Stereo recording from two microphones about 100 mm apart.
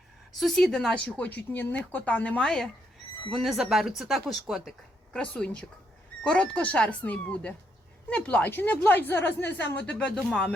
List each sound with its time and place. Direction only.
0.3 s speech: centre (ahead or behind)
5.1 s a woman's voice: 10° left (ahead or behind)
10.2 s speech: centre (ahead or behind)